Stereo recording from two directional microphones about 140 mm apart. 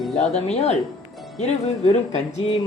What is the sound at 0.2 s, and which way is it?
Speech, 50° left (ahead or behind).